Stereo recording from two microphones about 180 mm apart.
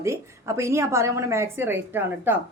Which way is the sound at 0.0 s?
15° right (ahead or behind).